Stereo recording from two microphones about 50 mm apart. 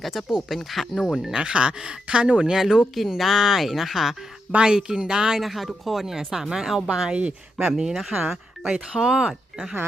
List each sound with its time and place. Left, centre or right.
0.0 s a woman's voice: centre
1.2 s a woman's voice: centre
4.5 s speech: centre
5.4 s a woman's voice: centre